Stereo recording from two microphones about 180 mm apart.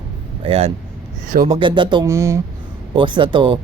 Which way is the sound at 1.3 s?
45° right (ahead or behind).